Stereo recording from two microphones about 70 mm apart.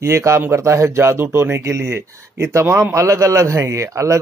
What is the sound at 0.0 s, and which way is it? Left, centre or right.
A man's voice, right.